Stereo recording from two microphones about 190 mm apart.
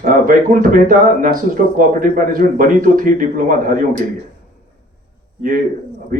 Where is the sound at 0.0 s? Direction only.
45° right (ahead or behind).